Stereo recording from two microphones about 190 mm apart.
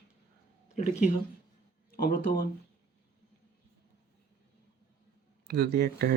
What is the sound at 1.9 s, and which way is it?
Speech, 50° left (ahead or behind).